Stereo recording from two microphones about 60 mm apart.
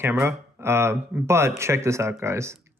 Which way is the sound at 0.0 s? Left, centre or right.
Right.